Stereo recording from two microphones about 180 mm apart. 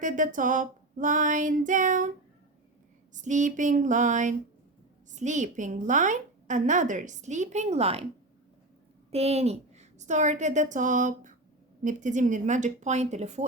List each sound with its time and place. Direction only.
0.0 s a woman's voice: 45° right (ahead or behind)
3.2 s a woman's voice: 40° right (ahead or behind)
9.0 s a woman's voice: 35° right (ahead or behind)